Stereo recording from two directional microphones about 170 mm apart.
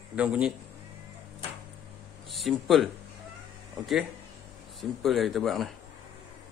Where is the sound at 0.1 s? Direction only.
5° right (ahead or behind).